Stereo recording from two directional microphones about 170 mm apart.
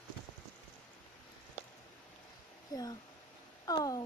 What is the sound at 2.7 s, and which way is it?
Speech, 25° left (ahead or behind).